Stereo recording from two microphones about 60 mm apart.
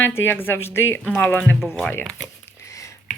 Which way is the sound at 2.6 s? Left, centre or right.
Left.